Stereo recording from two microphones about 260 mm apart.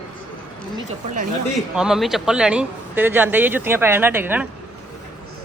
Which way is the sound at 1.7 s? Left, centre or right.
Centre.